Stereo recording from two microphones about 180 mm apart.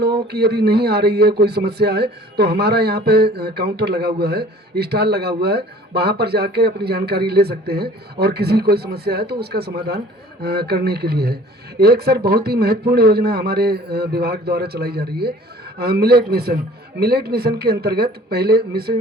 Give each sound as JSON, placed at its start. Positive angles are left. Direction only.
{"t": 0.3, "sound": "speech", "side_deg": -60}